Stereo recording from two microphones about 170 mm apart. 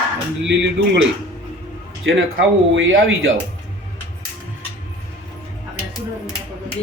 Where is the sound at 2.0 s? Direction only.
90° right.